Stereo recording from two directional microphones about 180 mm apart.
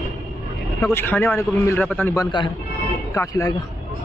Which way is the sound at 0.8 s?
10° left (ahead or behind).